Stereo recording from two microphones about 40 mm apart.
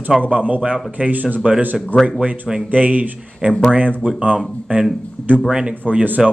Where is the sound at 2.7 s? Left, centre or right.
Right.